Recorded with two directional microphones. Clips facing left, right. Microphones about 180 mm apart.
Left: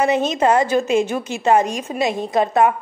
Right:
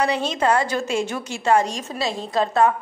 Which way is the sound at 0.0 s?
20° left (ahead or behind).